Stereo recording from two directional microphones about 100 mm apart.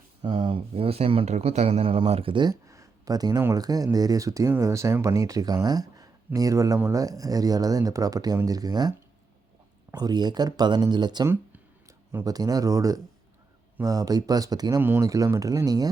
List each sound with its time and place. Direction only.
0.2 s speech: 60° right (ahead or behind)
2.3 s speech: 45° right (ahead or behind)
2.6 s a sound: 30° right (ahead or behind)
3.5 s speech: 40° right (ahead or behind)
14.8 s speech: 20° right (ahead or behind)
15.0 s speech: 35° right (ahead or behind)